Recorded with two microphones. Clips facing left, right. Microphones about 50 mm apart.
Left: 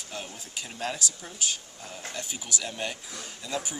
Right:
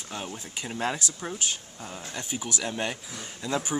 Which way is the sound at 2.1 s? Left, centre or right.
Right.